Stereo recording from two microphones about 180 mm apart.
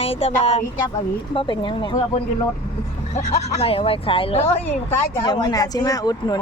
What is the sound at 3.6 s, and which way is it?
A woman's voice, 30° left (ahead or behind).